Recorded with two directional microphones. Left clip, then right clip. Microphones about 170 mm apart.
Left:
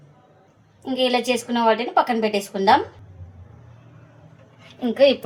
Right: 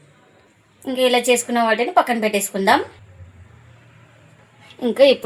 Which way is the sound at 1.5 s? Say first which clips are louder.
Left 1 dB; 50° right (ahead or behind).